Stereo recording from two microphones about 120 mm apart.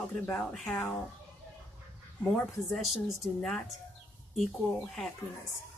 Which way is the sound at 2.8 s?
Centre (ahead or behind).